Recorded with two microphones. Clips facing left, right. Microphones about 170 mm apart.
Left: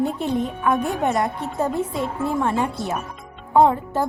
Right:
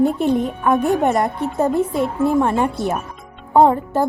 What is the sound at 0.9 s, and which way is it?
A woman's voice, 60° right (ahead or behind).